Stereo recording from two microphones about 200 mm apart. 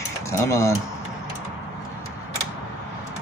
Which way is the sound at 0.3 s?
15° left (ahead or behind).